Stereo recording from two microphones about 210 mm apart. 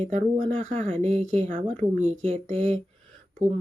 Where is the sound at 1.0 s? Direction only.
30° right (ahead or behind).